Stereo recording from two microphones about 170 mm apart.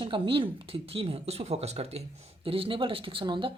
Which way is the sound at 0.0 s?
30° right (ahead or behind).